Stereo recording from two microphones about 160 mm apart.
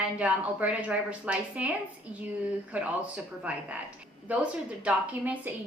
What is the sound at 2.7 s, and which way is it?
Speech, 10° right (ahead or behind).